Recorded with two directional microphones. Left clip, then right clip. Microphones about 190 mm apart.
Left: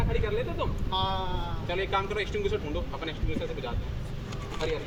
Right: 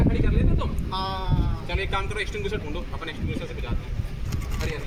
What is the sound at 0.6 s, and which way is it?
Speech, 15° left (ahead or behind).